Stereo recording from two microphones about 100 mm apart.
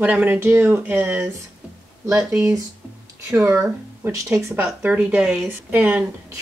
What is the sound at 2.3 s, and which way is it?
Speech, 30° right (ahead or behind).